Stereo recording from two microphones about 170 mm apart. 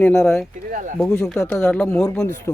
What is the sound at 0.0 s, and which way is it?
Speech, 5° left (ahead or behind).